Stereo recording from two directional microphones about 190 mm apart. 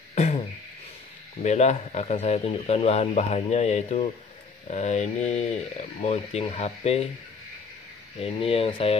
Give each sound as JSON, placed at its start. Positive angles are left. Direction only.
{"t": 0.1, "sound": "beatboxing", "side_deg": 35}
{"t": 1.4, "sound": "speech", "side_deg": 35}
{"t": 8.2, "sound": "speech", "side_deg": 30}